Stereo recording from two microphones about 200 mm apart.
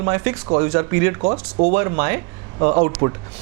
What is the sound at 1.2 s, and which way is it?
Speech, 35° right (ahead or behind).